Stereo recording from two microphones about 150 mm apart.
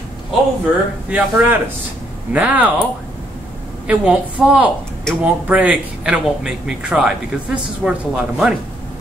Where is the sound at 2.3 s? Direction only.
10° right (ahead or behind).